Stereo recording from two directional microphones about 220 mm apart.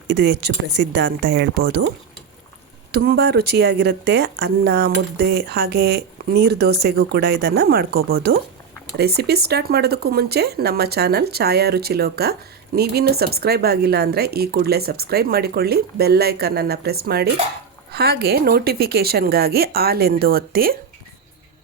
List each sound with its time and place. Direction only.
0.1 s speech: 50° right (ahead or behind)
2.9 s speech: 45° right (ahead or behind)